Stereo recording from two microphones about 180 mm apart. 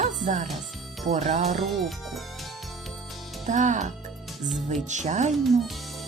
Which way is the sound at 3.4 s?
45° right (ahead or behind).